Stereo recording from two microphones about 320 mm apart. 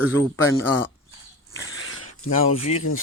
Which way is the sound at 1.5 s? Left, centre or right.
Left.